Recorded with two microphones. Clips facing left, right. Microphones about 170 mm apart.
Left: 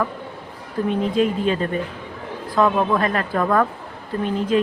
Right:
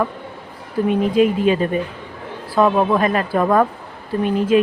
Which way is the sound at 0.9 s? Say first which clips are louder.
Right 4 dB; 15° right (ahead or behind).